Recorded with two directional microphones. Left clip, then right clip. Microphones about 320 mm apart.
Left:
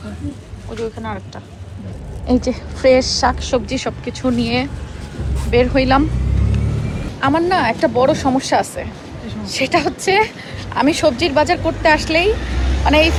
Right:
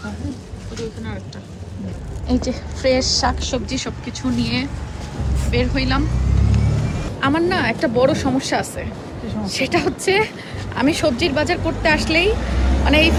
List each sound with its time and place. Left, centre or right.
2.2 s a woman's voice: centre
7.2 s a woman's voice: centre